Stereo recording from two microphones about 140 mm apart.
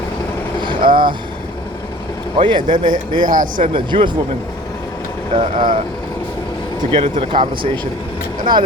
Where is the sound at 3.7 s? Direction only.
35° right (ahead or behind).